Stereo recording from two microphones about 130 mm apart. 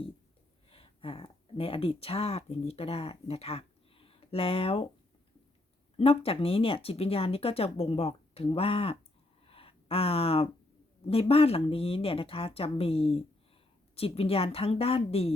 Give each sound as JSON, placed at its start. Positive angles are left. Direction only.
{"t": 0.7, "sound": "speech", "side_deg": 45}
{"t": 6.0, "sound": "speech", "side_deg": 45}
{"t": 9.5, "sound": "a sound", "side_deg": 45}
{"t": 11.0, "sound": "speech", "side_deg": 50}